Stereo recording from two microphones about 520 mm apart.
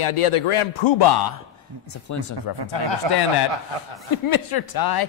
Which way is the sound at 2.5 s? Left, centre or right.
Right.